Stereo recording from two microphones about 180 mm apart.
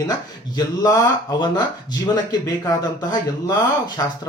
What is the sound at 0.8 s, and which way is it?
Speech, 20° left (ahead or behind).